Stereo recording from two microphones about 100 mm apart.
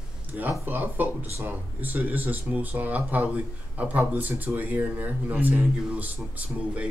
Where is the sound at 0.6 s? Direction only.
20° right (ahead or behind).